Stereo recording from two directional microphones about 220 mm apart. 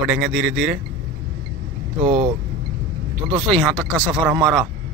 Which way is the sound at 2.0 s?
25° right (ahead or behind).